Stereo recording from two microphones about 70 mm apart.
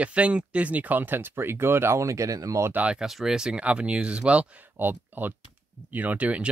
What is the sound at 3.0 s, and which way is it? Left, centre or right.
Speech, centre.